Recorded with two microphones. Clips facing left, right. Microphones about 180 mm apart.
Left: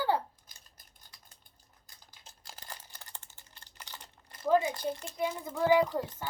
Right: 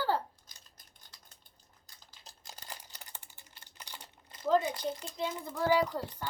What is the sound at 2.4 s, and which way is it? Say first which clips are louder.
Crumpling: even; 15° right (ahead or behind).